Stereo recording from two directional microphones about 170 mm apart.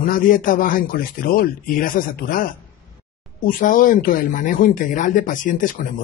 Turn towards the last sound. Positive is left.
turn(degrees=50)  # may be behind; listen again after turning